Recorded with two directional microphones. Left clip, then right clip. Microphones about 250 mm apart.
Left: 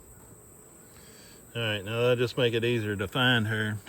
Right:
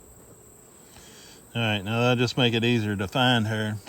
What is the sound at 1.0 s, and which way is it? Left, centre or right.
Speech, right.